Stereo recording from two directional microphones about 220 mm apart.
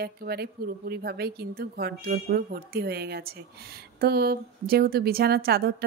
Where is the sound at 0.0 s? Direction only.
45° right (ahead or behind).